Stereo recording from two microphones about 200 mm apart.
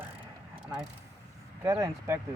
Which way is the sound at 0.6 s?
5° right (ahead or behind).